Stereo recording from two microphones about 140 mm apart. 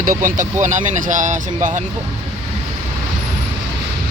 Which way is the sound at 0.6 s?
60° right (ahead or behind).